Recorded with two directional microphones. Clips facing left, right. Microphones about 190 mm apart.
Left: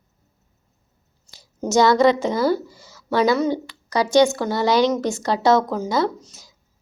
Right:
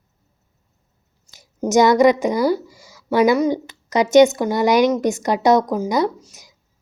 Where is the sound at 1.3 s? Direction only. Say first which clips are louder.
Right 3 dB; 20° right (ahead or behind).